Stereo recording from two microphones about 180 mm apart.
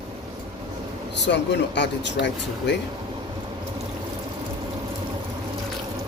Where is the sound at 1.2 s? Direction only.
75° left (ahead or behind).